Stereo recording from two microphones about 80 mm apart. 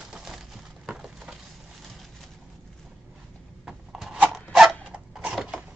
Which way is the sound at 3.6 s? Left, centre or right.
Centre.